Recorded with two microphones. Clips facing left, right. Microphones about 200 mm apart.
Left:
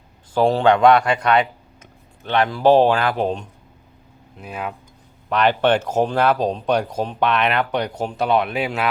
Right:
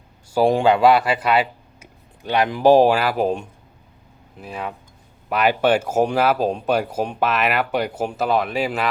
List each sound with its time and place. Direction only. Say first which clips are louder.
0.3 s speech: even; 10° right (ahead or behind)